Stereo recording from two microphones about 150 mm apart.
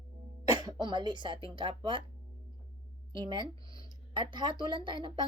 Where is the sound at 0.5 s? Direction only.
25° right (ahead or behind).